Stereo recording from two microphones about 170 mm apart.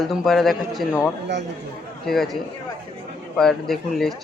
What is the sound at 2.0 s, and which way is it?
Speech, centre (ahead or behind).